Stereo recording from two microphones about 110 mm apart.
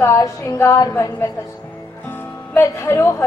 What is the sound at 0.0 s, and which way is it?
A woman's voice, 25° left (ahead or behind).